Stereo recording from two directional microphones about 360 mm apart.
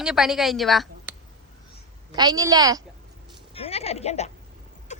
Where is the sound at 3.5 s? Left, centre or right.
Centre.